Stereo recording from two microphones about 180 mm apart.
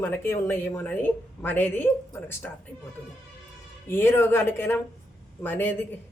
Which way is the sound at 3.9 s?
10° left (ahead or behind).